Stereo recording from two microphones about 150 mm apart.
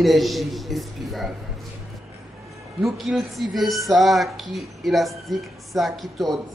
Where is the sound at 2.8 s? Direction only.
Centre (ahead or behind).